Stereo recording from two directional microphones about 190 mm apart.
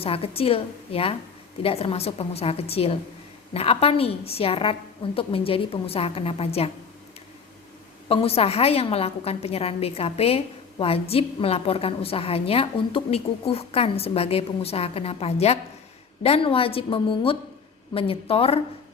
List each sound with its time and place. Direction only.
0.0 s a woman's voice: 30° left (ahead or behind)
8.0 s a woman's voice: 30° left (ahead or behind)